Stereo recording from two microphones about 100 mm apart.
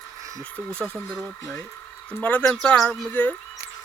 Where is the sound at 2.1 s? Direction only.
15° left (ahead or behind).